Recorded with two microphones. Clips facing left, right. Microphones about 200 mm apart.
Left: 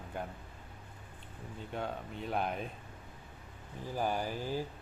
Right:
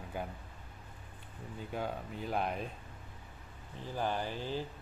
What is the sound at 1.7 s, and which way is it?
Speech, centre (ahead or behind).